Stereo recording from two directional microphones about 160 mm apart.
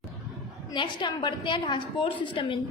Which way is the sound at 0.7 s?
30° left (ahead or behind).